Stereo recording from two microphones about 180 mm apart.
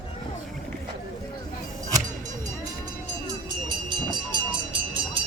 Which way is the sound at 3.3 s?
25° right (ahead or behind).